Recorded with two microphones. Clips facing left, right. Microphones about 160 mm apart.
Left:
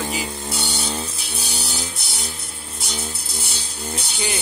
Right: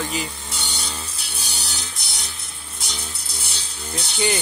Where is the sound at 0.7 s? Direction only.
40° left (ahead or behind).